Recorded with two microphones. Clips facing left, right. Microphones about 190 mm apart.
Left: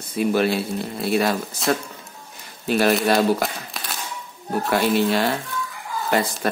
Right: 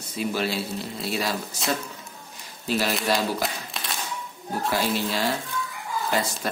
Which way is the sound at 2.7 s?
55° left (ahead or behind).